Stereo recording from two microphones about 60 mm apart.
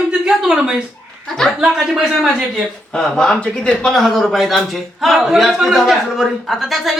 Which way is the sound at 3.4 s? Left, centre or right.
Left.